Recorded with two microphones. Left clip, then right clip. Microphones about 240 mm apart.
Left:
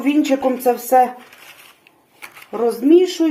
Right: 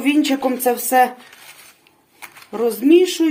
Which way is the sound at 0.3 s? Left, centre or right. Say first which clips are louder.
Left 2 dB; right.